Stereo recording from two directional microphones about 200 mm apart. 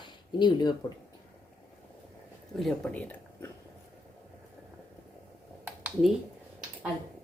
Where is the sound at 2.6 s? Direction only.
5° left (ahead or behind).